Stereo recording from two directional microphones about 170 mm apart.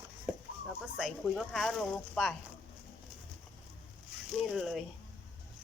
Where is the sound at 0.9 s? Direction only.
Centre (ahead or behind).